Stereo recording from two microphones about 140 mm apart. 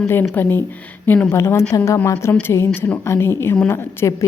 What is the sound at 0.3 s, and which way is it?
A woman's voice, 15° left (ahead or behind).